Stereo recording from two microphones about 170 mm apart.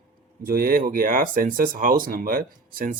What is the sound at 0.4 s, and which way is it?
A man's voice, 60° right (ahead or behind).